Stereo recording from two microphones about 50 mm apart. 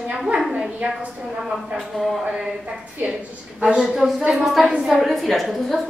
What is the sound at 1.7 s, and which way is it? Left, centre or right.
Speech, centre.